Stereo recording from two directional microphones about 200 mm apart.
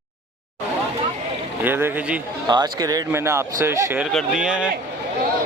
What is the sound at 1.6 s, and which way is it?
A man's voice, 10° right (ahead or behind).